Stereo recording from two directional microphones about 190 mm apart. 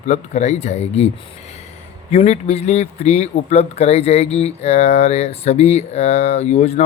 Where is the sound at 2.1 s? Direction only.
35° left (ahead or behind).